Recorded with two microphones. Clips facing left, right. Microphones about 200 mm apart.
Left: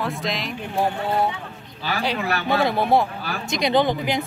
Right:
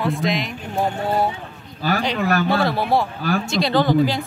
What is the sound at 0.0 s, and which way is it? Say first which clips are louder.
Speech: right 5 dB; centre (ahead or behind).